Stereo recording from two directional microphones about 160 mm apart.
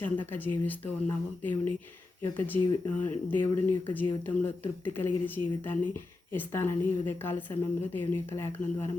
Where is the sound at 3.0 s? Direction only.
10° left (ahead or behind).